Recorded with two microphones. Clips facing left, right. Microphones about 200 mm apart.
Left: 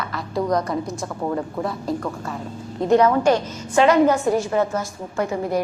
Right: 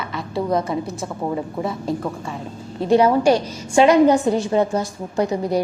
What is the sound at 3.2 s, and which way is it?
A woman's voice, 10° right (ahead or behind).